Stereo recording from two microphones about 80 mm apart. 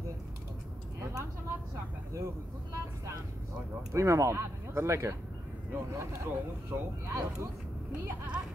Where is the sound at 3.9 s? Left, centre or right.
Right.